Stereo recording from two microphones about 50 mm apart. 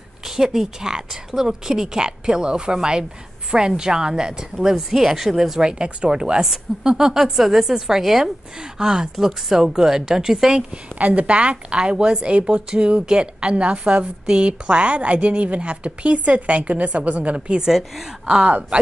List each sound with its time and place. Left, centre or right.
0.4 s a woman's voice: centre
5.7 s a woman's voice: centre
11.0 s speech: right
17.6 s a woman's voice: centre
18.4 s speech: right